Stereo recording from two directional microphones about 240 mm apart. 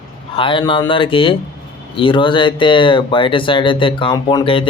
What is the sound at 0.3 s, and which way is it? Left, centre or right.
Speech, left.